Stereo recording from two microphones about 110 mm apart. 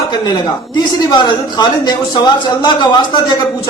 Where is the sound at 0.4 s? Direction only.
45° left (ahead or behind).